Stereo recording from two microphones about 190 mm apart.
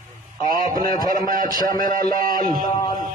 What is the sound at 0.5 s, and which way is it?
Speech, 45° right (ahead or behind).